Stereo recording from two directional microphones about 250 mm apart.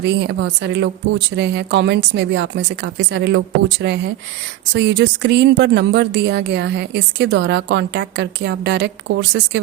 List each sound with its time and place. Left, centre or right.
0.0 s speech: right